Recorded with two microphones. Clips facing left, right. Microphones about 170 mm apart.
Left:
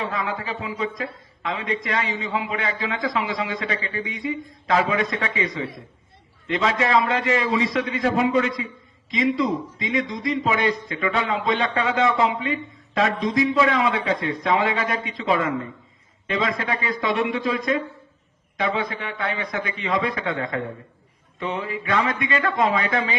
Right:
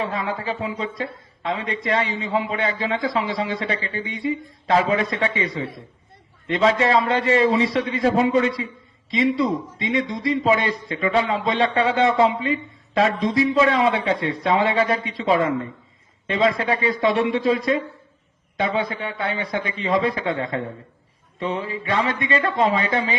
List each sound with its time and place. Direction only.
0.0 s a man's voice: 30° right (ahead or behind)
6.5 s a man's voice: 30° right (ahead or behind)